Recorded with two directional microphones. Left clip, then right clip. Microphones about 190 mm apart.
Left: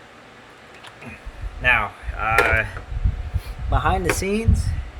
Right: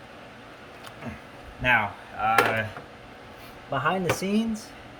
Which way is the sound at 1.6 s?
Centre (ahead or behind).